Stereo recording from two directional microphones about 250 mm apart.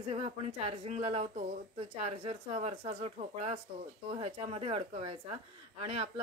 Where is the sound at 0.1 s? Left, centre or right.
Right.